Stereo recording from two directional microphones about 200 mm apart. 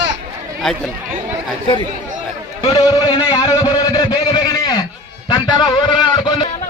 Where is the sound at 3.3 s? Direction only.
20° left (ahead or behind).